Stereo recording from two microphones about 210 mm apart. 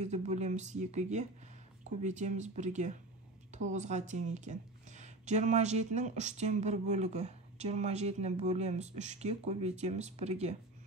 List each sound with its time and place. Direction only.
0.0 s speech: 35° right (ahead or behind)